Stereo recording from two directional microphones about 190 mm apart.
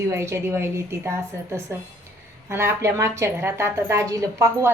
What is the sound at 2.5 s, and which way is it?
A woman's voice, 15° right (ahead or behind).